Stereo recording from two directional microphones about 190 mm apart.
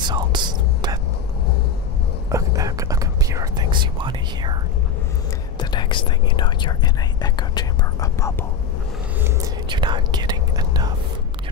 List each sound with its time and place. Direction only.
0.0 s whispering: 25° right (ahead or behind)
2.3 s whispering: 15° right (ahead or behind)
5.6 s whispering: 25° left (ahead or behind)
9.7 s whispering: 25° right (ahead or behind)